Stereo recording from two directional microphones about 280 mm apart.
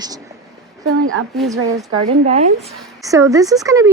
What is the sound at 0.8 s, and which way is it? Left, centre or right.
Speech, right.